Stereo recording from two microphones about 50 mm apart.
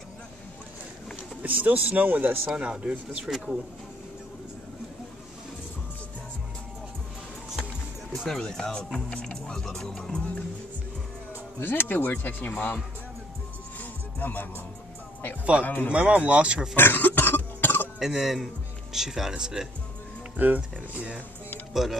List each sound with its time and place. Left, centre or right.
1.4 s speech: right
2.5 s speech: right
3.3 s speech: centre
8.3 s speech: centre
11.6 s speech: left
13.7 s music: left
15.6 s speech: left
15.9 s speech: right
16.7 s cough: left
17.9 s speech: centre
20.3 s speech: right
21.7 s speech: centre